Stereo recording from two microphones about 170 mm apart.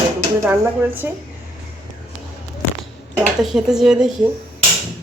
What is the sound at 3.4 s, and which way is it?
Speech, centre (ahead or behind).